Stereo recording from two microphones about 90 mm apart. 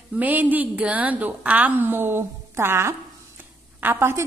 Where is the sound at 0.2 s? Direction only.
20° right (ahead or behind).